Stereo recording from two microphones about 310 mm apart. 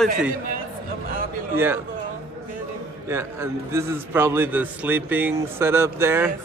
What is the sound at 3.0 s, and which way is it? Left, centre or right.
A man's voice, centre.